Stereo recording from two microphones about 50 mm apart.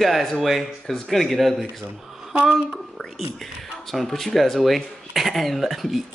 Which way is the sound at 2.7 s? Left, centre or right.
Centre.